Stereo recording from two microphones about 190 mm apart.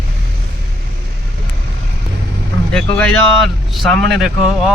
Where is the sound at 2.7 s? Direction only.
5° left (ahead or behind).